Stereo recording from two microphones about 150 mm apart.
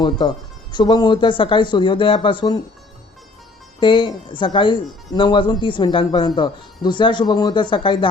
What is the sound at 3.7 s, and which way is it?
Speech, 35° left (ahead or behind).